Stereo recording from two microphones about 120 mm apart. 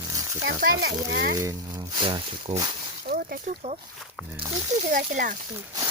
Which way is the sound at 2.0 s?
45° right (ahead or behind).